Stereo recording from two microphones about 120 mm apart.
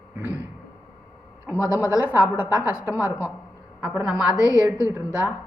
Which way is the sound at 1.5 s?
15° right (ahead or behind).